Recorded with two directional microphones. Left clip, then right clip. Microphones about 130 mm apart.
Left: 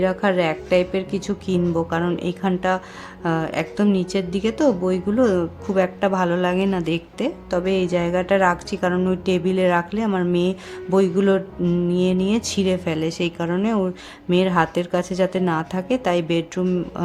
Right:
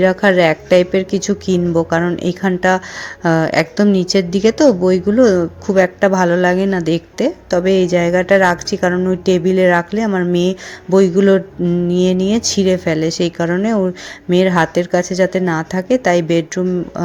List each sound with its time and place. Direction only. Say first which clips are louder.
0.0 s a woman's voice: right 8 dB; 35° right (ahead or behind)